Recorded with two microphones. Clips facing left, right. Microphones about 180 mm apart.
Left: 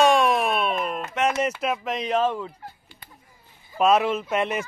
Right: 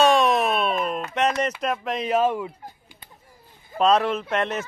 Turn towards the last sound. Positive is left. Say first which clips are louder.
# even
turn(degrees=10)  # may be behind; listen again after turning